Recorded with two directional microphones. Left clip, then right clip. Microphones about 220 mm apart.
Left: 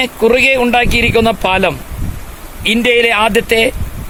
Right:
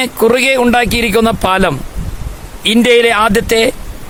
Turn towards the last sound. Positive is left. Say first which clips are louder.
# even
turn(degrees=-25)  # may be behind; listen again after turning